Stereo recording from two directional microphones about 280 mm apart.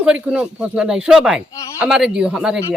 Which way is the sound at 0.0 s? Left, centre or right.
Centre.